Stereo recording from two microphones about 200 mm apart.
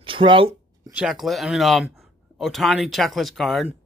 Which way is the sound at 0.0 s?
25° right (ahead or behind).